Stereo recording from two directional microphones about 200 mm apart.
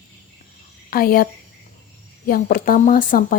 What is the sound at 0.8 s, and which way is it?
A woman's voice, 45° left (ahead or behind).